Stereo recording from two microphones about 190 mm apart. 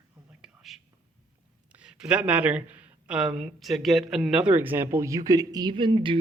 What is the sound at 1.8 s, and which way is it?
A man's voice, 5° right (ahead or behind).